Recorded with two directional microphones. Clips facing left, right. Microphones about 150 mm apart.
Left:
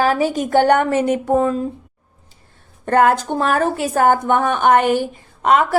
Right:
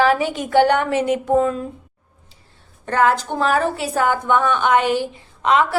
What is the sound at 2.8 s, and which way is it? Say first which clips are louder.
A woman's voice: left 3 dB; 50° left (ahead or behind).